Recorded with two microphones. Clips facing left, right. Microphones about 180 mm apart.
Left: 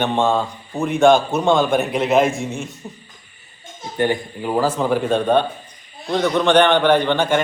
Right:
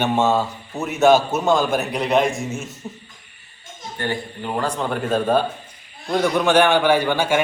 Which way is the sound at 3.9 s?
20° left (ahead or behind).